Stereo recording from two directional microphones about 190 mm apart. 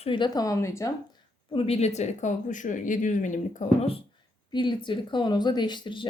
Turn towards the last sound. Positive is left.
turn(degrees=25)  # may be behind; listen again after turning